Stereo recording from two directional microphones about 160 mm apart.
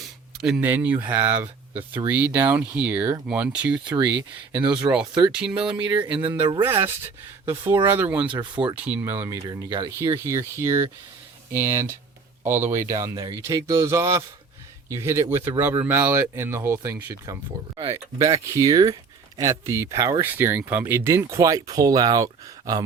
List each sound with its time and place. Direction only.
0.4 s speech: 5° right (ahead or behind)
3.8 s speech: 30° right (ahead or behind)
5.3 s speech: 5° right (ahead or behind)
6.4 s speech: 30° right (ahead or behind)
6.7 s speech: 15° right (ahead or behind)
8.3 s speech: 30° right (ahead or behind)
8.8 s speech: 10° right (ahead or behind)
9.5 s speech: 25° right (ahead or behind)